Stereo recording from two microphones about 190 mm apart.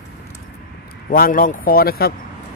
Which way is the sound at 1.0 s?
50° left (ahead or behind).